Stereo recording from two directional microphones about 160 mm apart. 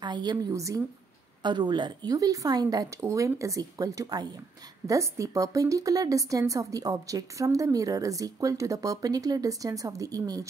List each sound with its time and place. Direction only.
0.0 s a woman's voice: 25° right (ahead or behind)